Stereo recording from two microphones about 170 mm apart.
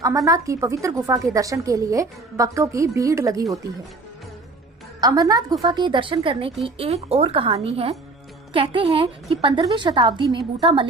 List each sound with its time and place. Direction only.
0.0 s a woman's voice: 20° right (ahead or behind)
4.9 s a woman's voice: 20° right (ahead or behind)